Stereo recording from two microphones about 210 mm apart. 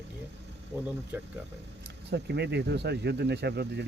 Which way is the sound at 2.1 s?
50° right (ahead or behind).